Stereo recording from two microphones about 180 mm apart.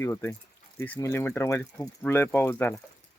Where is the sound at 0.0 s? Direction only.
15° left (ahead or behind).